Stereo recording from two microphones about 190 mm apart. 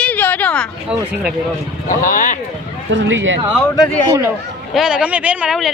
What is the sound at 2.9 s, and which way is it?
Speech, 75° right (ahead or behind).